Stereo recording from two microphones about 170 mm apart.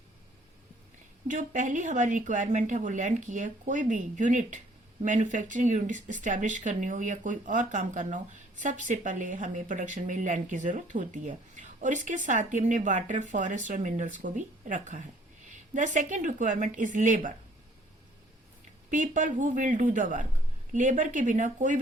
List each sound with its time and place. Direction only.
1.3 s speech: 45° right (ahead or behind)
18.9 s speech: 45° right (ahead or behind)